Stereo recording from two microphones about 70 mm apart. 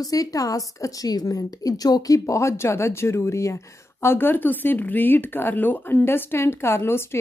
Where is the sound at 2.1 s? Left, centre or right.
Left.